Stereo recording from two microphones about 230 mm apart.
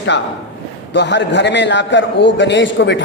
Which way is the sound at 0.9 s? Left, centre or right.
Left.